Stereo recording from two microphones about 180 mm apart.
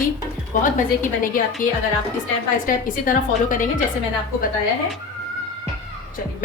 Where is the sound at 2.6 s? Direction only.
50° left (ahead or behind).